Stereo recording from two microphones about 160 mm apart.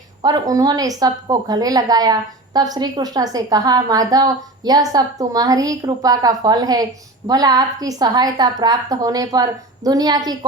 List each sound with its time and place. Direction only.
0.2 s a woman's voice: 25° right (ahead or behind)